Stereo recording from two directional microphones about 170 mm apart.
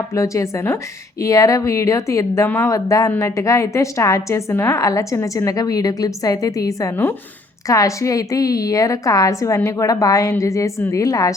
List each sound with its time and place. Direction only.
0.1 s a woman's voice: 20° left (ahead or behind)